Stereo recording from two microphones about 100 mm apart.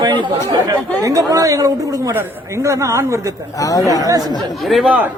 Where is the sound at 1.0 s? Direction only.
35° right (ahead or behind).